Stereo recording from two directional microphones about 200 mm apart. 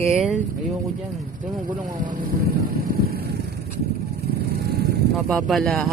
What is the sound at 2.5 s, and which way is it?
Vehicle, 50° right (ahead or behind).